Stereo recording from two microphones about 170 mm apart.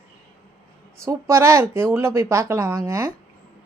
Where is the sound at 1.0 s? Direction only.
15° right (ahead or behind).